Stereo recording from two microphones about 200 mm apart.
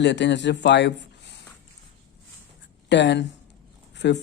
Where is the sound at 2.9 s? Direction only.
60° left (ahead or behind).